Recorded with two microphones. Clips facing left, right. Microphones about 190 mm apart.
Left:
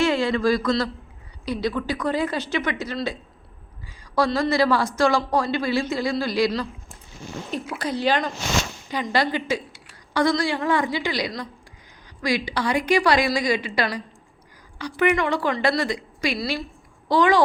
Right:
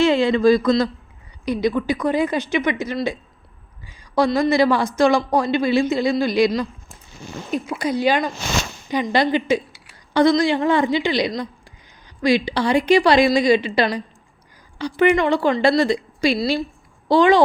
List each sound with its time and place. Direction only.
0.0 s speech: 20° right (ahead or behind)
7.7 s speech: 10° right (ahead or behind)